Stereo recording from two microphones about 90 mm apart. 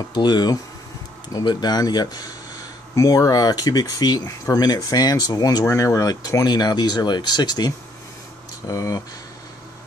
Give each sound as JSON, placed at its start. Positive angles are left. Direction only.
{"t": 0.1, "sound": "speech", "side_deg": 55}
{"t": 2.9, "sound": "speech", "side_deg": 40}
{"t": 5.7, "sound": "speech", "side_deg": 35}
{"t": 8.6, "sound": "speech", "side_deg": 40}